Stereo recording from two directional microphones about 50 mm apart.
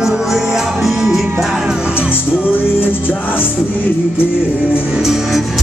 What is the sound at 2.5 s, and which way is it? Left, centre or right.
Music, left.